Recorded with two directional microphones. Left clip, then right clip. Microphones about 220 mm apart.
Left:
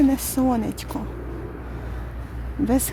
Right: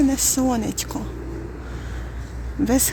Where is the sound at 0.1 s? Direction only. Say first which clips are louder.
Right 1 dB; 5° left (ahead or behind).